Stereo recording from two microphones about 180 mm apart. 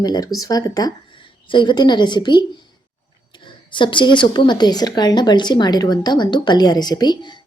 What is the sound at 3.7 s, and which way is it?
Speech, 25° left (ahead or behind).